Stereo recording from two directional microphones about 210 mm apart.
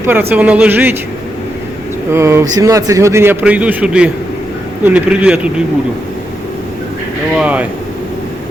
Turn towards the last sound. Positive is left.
turn(degrees=-5)  # may be behind; listen again after turning